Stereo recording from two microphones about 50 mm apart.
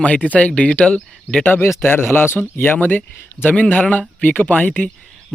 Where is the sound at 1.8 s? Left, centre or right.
Left.